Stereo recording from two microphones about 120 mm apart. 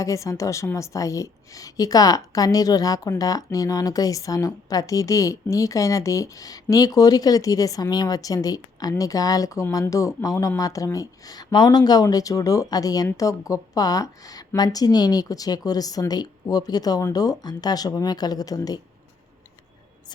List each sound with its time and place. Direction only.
0.0 s a woman's voice: 25° left (ahead or behind)